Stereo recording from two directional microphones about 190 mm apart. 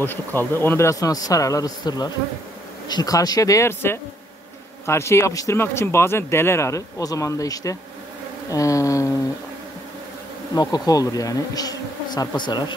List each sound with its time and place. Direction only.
0.0 s speech: 10° left (ahead or behind)
10.5 s bee: 20° left (ahead or behind)